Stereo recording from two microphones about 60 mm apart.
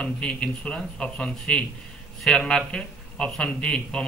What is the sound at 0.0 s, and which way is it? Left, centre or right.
A man's voice, centre.